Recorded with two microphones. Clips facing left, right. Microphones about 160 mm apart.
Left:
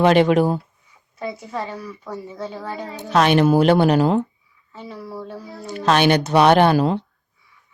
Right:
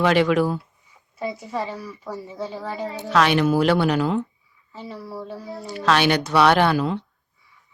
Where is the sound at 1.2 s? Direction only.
Centre (ahead or behind).